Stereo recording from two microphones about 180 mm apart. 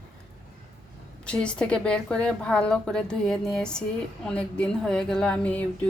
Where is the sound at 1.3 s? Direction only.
5° left (ahead or behind).